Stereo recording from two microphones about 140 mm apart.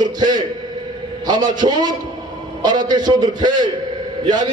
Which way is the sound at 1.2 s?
30° right (ahead or behind).